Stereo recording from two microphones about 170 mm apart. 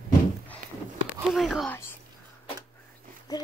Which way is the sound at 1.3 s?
Centre (ahead or behind).